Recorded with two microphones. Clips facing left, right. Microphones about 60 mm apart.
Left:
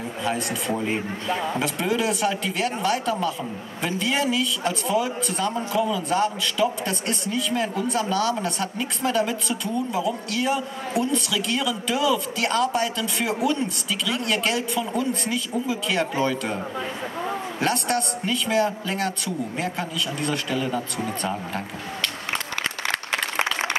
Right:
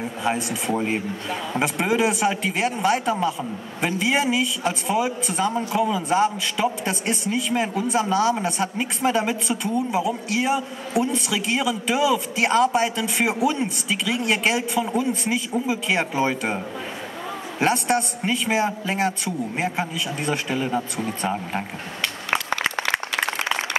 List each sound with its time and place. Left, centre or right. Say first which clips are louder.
0.2 s a man's voice: right 1 dB; centre
17.6 s speech: right 4 dB; centre